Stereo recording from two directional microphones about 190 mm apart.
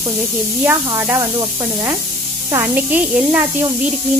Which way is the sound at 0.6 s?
15° right (ahead or behind).